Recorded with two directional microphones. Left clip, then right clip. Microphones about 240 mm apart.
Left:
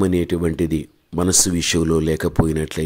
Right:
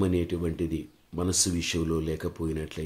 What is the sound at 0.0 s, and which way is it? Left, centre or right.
Speech, left.